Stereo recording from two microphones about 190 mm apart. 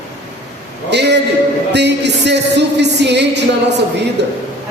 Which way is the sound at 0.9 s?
65° right (ahead or behind).